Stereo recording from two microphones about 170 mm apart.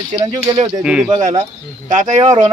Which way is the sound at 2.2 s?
25° right (ahead or behind).